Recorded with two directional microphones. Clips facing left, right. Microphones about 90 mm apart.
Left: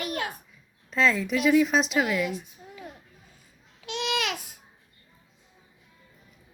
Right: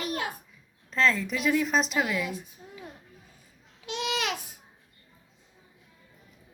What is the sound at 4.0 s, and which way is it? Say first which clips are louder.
Speech: left 2 dB; 20° right (ahead or behind).